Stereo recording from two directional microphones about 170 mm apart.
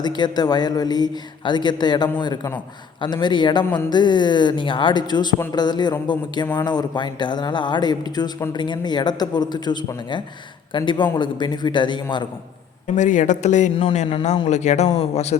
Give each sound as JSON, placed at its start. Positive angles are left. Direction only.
{"t": 0.0, "sound": "speech", "side_deg": 25}
{"t": 13.0, "sound": "speech", "side_deg": 50}